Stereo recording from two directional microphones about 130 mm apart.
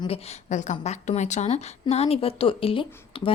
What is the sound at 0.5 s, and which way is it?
A woman's voice, 65° left (ahead or behind).